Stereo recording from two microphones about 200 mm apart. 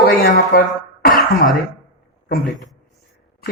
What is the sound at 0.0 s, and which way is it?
Speech, 50° left (ahead or behind).